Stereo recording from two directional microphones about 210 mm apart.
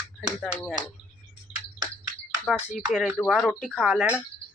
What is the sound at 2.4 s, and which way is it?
Speech, 5° left (ahead or behind).